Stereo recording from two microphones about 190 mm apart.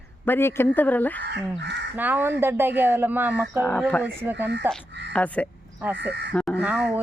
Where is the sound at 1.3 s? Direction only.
65° right (ahead or behind).